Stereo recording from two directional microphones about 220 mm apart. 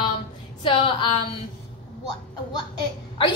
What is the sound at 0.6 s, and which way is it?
Speech, 20° left (ahead or behind).